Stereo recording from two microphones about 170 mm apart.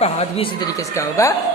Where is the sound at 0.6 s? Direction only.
20° left (ahead or behind).